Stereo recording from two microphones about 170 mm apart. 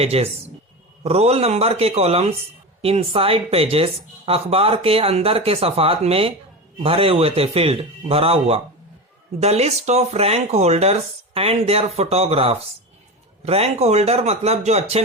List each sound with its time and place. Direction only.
0.0 s speech: 35° right (ahead or behind)